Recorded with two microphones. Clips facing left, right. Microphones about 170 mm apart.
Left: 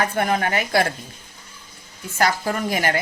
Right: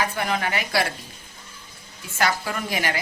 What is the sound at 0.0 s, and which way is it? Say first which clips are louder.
Speech: left 4 dB; 50° left (ahead or behind).